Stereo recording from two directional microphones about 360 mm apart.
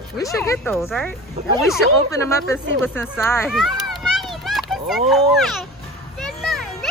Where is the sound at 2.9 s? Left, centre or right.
Centre.